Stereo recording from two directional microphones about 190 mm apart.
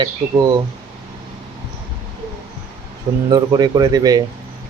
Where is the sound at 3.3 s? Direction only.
20° right (ahead or behind).